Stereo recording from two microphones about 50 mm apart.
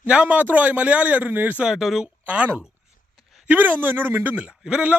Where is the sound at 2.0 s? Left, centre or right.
Right.